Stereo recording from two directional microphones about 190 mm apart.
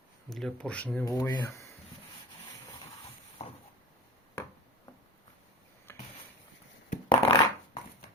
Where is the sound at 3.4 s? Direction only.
35° left (ahead or behind).